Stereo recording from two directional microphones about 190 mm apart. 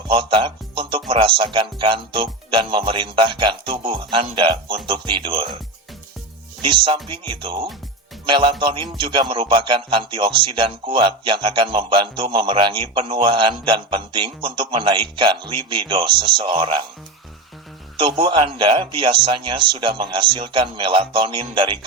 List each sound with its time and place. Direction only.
0.2 s a man's voice: 25° right (ahead or behind)
6.7 s a man's voice: 25° right (ahead or behind)
17.9 s a man's voice: 25° right (ahead or behind)